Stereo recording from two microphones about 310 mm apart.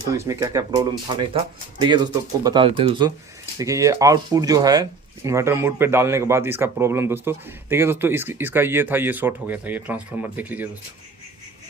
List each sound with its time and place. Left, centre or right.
0.2 s speech: centre
2.4 s speech: centre